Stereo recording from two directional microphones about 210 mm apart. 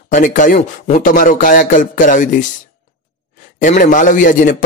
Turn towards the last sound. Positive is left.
turn(degrees=40)  # may be behind; listen again after turning